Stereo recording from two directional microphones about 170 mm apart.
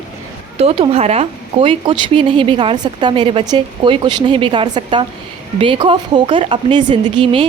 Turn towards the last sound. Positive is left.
turn(degrees=-30)  # may be behind; listen again after turning